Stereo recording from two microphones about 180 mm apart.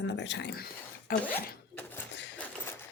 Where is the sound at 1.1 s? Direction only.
50° left (ahead or behind).